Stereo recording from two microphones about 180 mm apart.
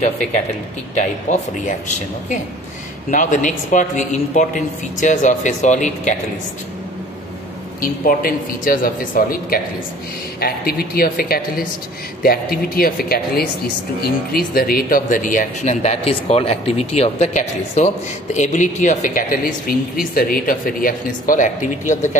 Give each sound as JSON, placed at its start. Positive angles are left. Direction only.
{"t": 0.9, "sound": "speech", "side_deg": 40}
{"t": 7.8, "sound": "speech", "side_deg": 50}